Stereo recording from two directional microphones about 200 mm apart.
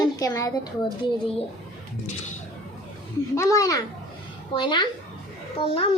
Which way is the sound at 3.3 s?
15° left (ahead or behind).